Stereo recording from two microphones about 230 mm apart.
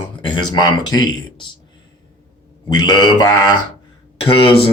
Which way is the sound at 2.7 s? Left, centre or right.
Centre.